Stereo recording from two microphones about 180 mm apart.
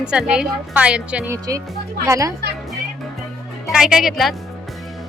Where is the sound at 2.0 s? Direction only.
15° right (ahead or behind).